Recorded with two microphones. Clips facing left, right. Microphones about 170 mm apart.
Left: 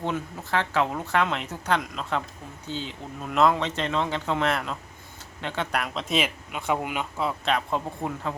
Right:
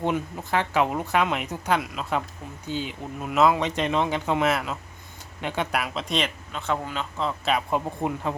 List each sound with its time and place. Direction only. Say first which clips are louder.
0.0 s speech: right 3 dB; 15° right (ahead or behind); by 7.3 s 10° left (ahead or behind)
7.4 s speech: right 4 dB; 10° right (ahead or behind)